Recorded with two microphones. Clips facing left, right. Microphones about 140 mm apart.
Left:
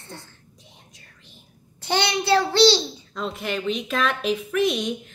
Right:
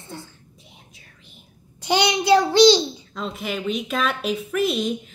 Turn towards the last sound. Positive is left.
turn(degrees=0)  # may be behind; listen again after turning